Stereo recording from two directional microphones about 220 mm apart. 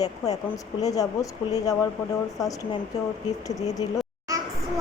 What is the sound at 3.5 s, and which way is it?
Speech, 15° left (ahead or behind).